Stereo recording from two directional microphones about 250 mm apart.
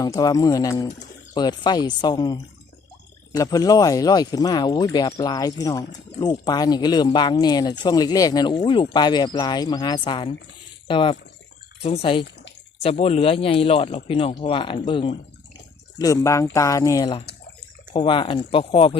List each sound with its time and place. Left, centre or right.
0.0 s speech: centre